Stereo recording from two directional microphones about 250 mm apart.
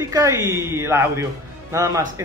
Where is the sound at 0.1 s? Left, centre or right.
Centre.